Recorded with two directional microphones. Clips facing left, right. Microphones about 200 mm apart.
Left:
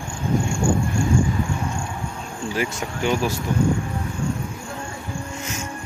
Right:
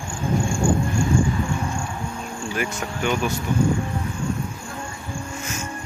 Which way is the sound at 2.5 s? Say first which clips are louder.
Left 2 dB; 25° left (ahead or behind).